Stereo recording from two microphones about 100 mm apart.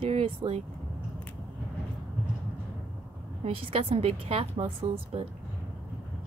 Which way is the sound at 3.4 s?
80° right.